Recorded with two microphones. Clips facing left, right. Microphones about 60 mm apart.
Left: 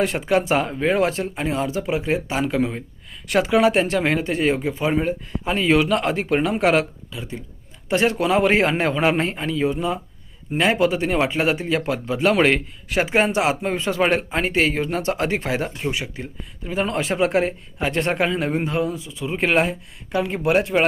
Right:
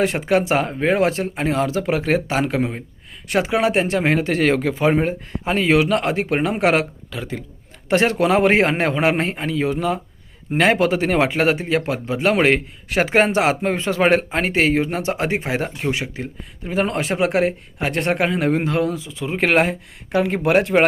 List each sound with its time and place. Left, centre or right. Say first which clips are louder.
0.0 s speech: right 2 dB; right
1.9 s speech: right 2 dB; right
2.3 s a man's voice: right 1 dB; right
3.3 s speech: left 1 dB; right
4.2 s speech: right 3 dB; right
4.8 s speech: right 3 dB; right
7.1 s speech: right 4 dB; right
7.9 s a man's voice: right 2 dB; right
19.2 s speech: right 1 dB; right
20.1 s a man's voice: right 3 dB; right